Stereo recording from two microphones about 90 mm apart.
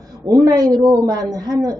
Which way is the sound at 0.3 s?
40° right (ahead or behind).